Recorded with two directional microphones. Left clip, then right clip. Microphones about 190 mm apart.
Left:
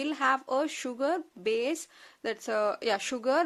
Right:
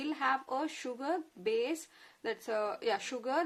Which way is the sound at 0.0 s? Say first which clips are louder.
Left 5 dB; 45° left (ahead or behind).